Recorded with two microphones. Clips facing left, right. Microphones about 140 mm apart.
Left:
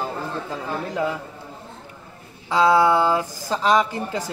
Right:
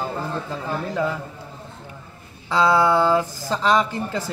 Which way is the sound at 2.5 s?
10° left (ahead or behind).